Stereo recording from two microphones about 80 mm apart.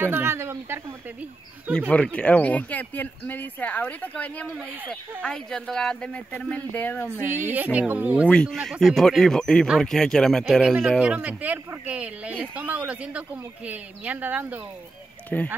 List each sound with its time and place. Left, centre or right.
0.0 s speech: right
1.9 s speech: centre
7.1 s speech: right
8.3 s speech: centre
8.5 s speech: centre
11.1 s speech: right
15.2 s speech: centre